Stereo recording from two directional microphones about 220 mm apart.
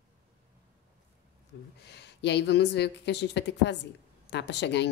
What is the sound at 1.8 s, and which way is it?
A woman's voice, 50° left (ahead or behind).